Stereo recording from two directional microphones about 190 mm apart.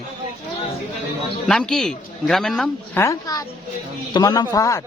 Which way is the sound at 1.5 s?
5° left (ahead or behind).